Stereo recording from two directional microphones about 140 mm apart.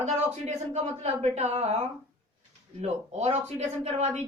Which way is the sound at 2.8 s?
50° right (ahead or behind).